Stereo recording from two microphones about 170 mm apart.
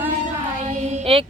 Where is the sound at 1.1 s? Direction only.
30° right (ahead or behind).